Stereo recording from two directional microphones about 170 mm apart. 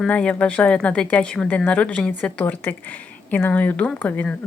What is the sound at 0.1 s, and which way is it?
Speech, 5° left (ahead or behind).